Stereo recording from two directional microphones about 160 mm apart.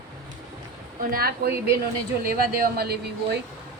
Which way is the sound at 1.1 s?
70° right (ahead or behind).